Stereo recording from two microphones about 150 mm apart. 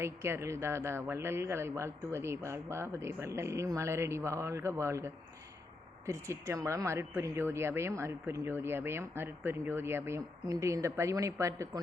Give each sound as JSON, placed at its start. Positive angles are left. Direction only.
{"t": 0.0, "sound": "speech", "side_deg": -15}